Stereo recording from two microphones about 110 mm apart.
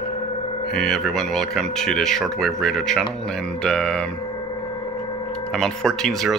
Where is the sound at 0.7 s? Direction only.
Centre (ahead or behind).